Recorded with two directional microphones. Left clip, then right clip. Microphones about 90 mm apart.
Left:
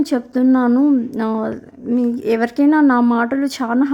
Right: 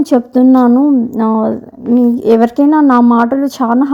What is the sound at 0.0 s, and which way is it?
Speech, 25° right (ahead or behind).